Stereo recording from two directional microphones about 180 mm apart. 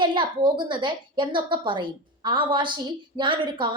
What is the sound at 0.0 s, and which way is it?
A woman's voice, 25° right (ahead or behind).